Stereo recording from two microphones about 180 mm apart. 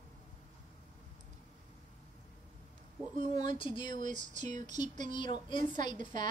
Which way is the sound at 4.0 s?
45° right (ahead or behind).